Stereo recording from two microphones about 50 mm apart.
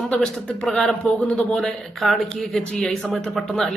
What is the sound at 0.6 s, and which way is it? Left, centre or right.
A woman's voice, centre.